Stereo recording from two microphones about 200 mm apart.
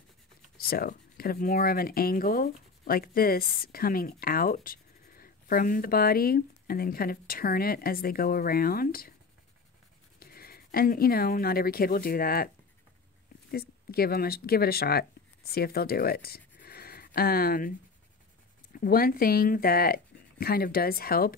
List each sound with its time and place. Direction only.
0.6 s speech: 50° left (ahead or behind)
10.1 s speech: 50° left (ahead or behind)
13.5 s speech: 50° left (ahead or behind)